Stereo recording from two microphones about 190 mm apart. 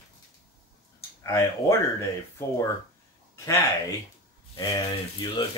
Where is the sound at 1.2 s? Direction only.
15° left (ahead or behind).